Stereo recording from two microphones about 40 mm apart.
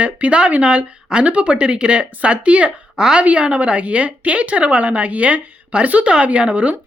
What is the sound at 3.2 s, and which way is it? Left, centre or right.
Speech, right.